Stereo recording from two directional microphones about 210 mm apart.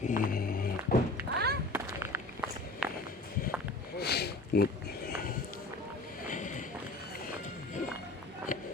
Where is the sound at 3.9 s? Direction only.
50° left (ahead or behind).